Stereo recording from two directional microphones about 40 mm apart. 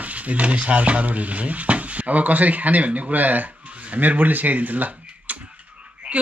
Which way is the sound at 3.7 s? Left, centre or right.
Right.